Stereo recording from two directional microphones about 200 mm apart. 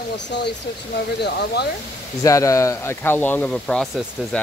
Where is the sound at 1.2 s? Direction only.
55° left (ahead or behind).